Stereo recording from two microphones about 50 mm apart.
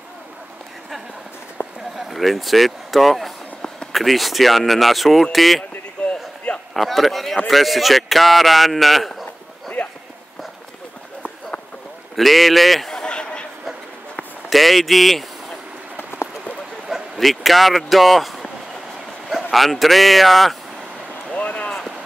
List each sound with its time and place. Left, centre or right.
2.0 s a man's voice: centre
6.0 s a sound: centre
6.7 s a man's voice: centre
9.8 s run: centre
12.2 s a man's voice: centre
12.9 s a sound: centre
14.5 s a man's voice: centre
17.2 s a man's voice: centre
19.5 s a man's voice: centre
21.3 s a sound: left